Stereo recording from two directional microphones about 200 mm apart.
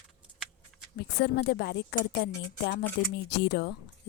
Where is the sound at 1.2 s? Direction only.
55° left (ahead or behind).